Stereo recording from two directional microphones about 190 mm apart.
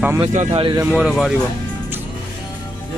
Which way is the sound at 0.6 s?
25° right (ahead or behind).